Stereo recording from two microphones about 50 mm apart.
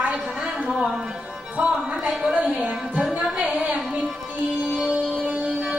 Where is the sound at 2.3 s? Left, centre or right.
Right.